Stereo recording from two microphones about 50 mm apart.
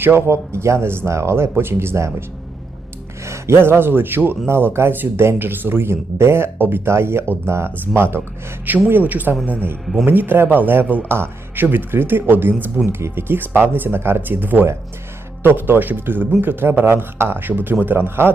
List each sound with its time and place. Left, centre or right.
0.3 s speech: right
2.0 s speech: right
3.2 s a man's voice: right
8.9 s speech: right
9.8 s speech: centre
10.1 s speech: right
11.1 s speech: right